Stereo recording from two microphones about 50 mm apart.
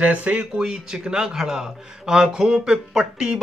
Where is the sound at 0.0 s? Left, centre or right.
Right.